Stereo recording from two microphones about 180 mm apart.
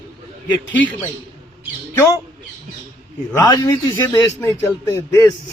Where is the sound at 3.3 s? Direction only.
20° left (ahead or behind).